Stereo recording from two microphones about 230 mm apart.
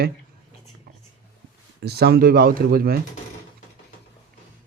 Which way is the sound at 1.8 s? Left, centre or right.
Right.